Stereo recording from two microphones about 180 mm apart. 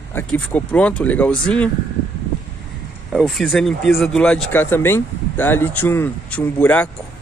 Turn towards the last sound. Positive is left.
turn(degrees=10)  # may be behind; listen again after turning